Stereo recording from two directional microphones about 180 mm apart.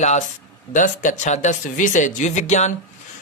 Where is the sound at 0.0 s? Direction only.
40° left (ahead or behind).